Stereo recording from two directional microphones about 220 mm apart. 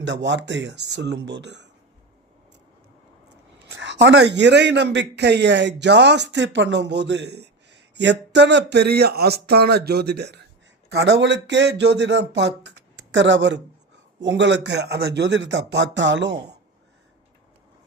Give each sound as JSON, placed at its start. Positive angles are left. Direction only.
{"t": 0.0, "sound": "a man's voice", "side_deg": -55}
{"t": 3.6, "sound": "a man's voice", "side_deg": -55}